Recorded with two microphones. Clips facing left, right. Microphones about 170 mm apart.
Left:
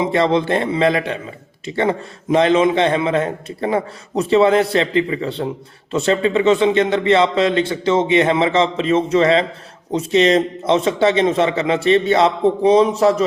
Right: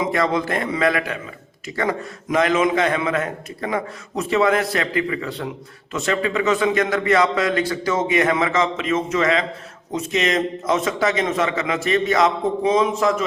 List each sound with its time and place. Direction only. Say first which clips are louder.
0.0 s a man's voice: left 4 dB; 25° left (ahead or behind)